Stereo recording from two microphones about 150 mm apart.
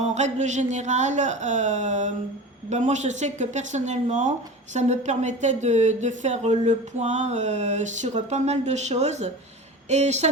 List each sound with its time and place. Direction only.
0.0 s speech: 50° right (ahead or behind)